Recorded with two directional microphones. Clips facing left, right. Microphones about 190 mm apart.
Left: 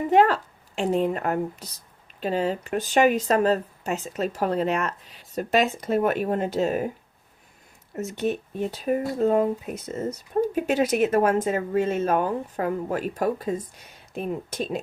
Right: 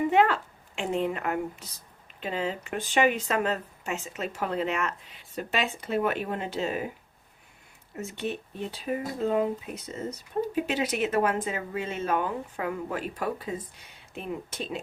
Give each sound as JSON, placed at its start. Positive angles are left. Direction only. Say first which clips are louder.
{"t": 0.1, "sound": "a woman's voice", "louder": "left 4 dB", "side_deg": 35}
{"t": 7.9, "sound": "speech", "louder": "left 6 dB", "side_deg": 45}